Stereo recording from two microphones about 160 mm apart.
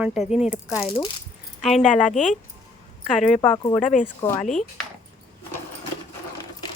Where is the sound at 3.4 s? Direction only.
30° left (ahead or behind).